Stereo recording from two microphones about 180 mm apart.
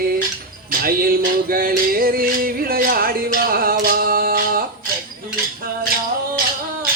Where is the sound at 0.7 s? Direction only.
55° right (ahead or behind).